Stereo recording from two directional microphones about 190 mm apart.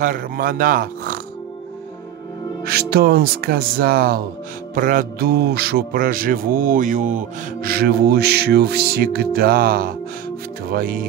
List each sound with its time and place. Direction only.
0.0 s mantra: 45° right (ahead or behind)
2.6 s mantra: 55° right (ahead or behind)